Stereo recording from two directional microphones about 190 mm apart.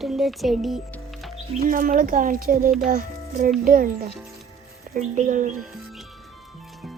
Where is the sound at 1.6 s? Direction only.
45° right (ahead or behind).